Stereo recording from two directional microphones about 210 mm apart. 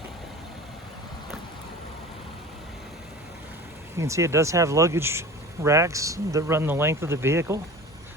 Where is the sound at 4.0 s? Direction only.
15° right (ahead or behind).